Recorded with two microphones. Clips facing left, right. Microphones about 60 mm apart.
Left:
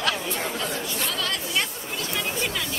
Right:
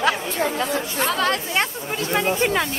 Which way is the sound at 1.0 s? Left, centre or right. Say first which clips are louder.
Right 11 dB; right.